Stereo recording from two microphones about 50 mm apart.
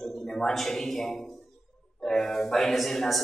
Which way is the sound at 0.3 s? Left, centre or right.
Centre.